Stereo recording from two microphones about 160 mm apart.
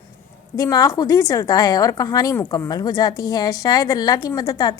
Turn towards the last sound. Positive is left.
turn(degrees=25)  # may be behind; listen again after turning